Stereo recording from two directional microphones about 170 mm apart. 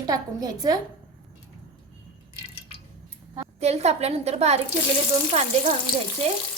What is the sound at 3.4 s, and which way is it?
A woman's voice, 40° right (ahead or behind).